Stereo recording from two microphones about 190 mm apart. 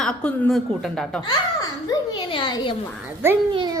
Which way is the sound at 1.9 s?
25° left (ahead or behind).